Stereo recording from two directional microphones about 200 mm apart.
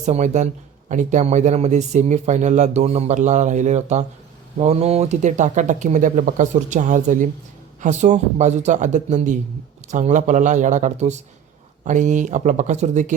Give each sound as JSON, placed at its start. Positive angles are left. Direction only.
{"t": 0.0, "sound": "a man's voice", "side_deg": -35}